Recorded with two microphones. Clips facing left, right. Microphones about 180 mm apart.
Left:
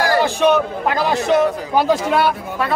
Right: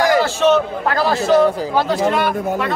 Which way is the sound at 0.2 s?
15° left (ahead or behind).